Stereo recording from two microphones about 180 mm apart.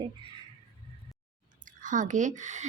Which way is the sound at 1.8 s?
45° right (ahead or behind).